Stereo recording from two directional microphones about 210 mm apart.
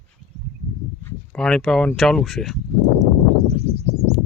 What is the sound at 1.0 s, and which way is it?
Speech, 5° left (ahead or behind).